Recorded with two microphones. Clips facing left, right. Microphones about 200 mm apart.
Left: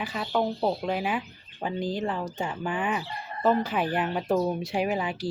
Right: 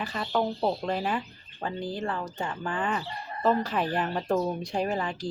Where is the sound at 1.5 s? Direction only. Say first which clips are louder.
Left 3 dB; 15° left (ahead or behind).